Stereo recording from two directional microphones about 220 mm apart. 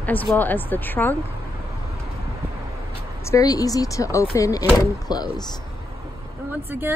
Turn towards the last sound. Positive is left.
turn(degrees=-10)  # may be behind; listen again after turning